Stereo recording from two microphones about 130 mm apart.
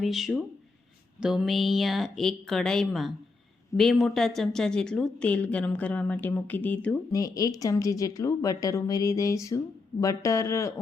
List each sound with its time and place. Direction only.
0.0 s a woman's voice: centre (ahead or behind)
7.1 s a woman's voice: 30° left (ahead or behind)